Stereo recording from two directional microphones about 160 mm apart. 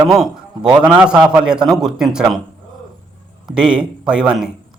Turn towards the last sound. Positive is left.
turn(degrees=-5)  # may be behind; listen again after turning